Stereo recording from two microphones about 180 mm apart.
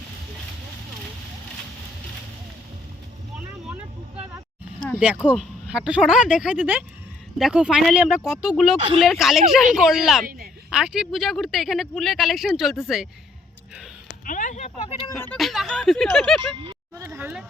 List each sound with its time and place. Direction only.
5.2 s speech: 10° right (ahead or behind)
14.3 s speech: 45° left (ahead or behind)
15.2 s speech: 5° left (ahead or behind)
17.0 s speech: 10° right (ahead or behind)